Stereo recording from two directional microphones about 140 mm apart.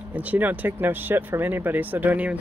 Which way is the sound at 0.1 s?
10° right (ahead or behind).